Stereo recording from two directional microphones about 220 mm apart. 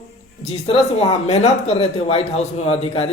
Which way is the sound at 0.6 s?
25° left (ahead or behind).